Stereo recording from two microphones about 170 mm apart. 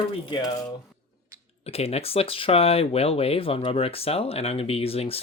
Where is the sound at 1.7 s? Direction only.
35° left (ahead or behind).